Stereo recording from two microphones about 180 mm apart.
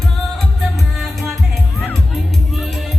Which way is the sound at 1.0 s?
Centre (ahead or behind).